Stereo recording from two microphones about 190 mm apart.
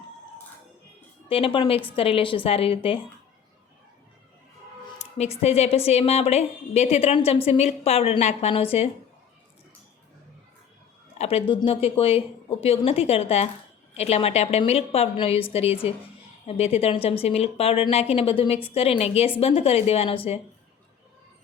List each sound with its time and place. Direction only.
1.3 s speech: 30° left (ahead or behind)
4.9 s a woman's voice: 35° left (ahead or behind)
11.2 s a woman's voice: 30° left (ahead or behind)